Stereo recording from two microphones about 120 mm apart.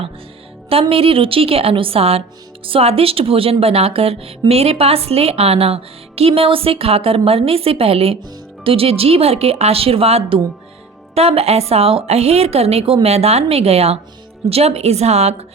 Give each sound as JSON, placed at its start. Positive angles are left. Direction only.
{"t": 0.7, "sound": "a woman's voice", "side_deg": -55}